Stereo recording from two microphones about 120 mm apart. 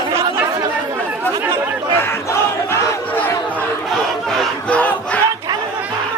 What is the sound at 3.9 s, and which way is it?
Battle cry, 5° left (ahead or behind).